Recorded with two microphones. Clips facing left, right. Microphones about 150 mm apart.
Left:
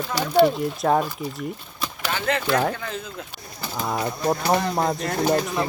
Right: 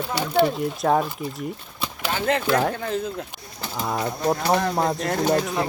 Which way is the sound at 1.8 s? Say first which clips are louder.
Right 1 dB; 30° right (ahead or behind).